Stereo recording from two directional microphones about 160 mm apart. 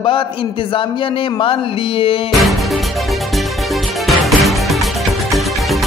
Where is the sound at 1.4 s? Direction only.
35° left (ahead or behind).